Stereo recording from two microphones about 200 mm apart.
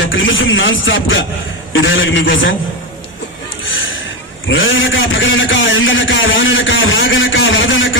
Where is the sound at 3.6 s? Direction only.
75° left (ahead or behind).